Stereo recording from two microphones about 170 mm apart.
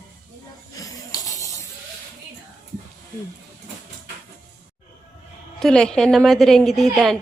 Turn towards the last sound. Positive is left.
turn(degrees=0)  # may be behind; listen again after turning